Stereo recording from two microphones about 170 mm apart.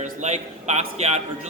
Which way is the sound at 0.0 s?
45° right (ahead or behind).